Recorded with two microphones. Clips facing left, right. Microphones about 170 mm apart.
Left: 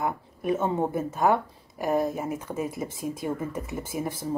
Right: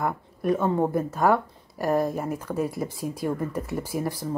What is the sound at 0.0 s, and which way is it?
Speech, 5° left (ahead or behind).